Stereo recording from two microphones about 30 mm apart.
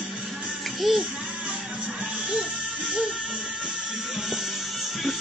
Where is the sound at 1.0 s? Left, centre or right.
Centre.